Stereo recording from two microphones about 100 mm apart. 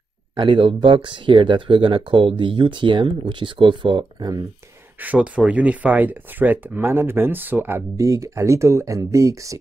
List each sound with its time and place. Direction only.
0.4 s speech: 55° right (ahead or behind)
4.2 s speech: 40° right (ahead or behind)
5.0 s speech: 15° right (ahead or behind)
8.0 s speech: 30° right (ahead or behind)